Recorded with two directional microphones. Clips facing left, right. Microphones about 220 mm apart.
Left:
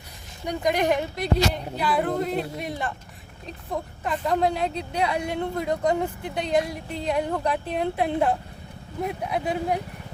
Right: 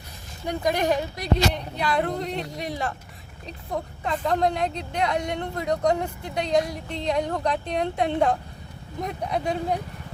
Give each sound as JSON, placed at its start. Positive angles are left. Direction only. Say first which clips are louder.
{"t": 0.7, "sound": "a woman's voice", "louder": "left 1 dB", "side_deg": 20}
{"t": 1.5, "sound": "speech", "louder": "even", "side_deg": 5}
{"t": 4.0, "sound": "speech", "louder": "even", "side_deg": 5}